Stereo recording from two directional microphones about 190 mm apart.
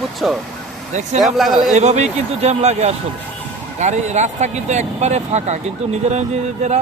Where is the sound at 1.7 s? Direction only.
35° right (ahead or behind).